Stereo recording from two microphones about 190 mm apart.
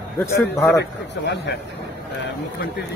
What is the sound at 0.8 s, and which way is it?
Speech, 65° left (ahead or behind).